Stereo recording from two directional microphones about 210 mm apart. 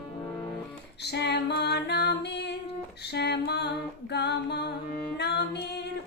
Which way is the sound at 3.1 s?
50° left (ahead or behind).